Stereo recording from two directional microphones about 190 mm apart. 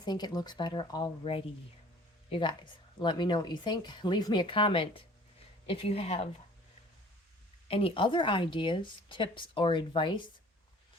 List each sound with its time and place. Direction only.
0.0 s speech: 20° left (ahead or behind)
7.7 s speech: 30° left (ahead or behind)